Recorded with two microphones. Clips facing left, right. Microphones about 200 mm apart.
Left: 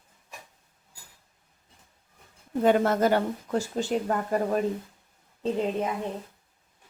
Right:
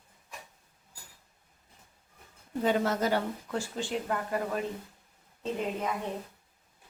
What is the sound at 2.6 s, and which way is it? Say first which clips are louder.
Speech: left 6 dB; 55° left (ahead or behind).